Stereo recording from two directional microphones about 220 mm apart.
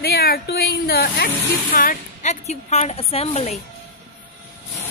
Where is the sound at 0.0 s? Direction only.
45° left (ahead or behind); by 3.5 s 30° left (ahead or behind).